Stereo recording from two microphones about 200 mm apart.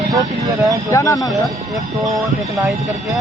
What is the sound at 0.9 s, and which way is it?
Speech, 15° left (ahead or behind).